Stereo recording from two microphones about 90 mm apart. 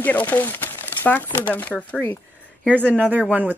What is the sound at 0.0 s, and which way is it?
Speech, 20° left (ahead or behind).